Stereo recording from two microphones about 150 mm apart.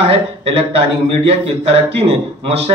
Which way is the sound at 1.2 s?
40° right (ahead or behind).